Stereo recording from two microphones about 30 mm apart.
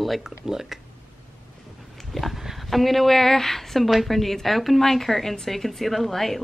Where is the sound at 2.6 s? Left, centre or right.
Centre.